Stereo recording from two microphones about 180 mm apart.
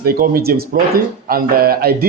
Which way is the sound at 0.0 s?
55° right (ahead or behind).